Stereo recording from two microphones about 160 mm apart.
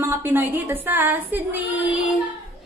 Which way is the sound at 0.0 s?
15° right (ahead or behind).